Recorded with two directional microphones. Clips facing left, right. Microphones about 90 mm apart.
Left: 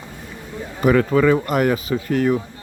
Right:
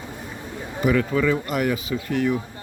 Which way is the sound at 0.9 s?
50° left (ahead or behind).